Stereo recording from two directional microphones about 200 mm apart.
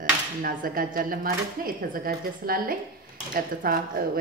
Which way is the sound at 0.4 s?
45° right (ahead or behind).